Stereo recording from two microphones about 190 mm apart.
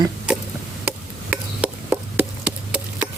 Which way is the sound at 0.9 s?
5° right (ahead or behind).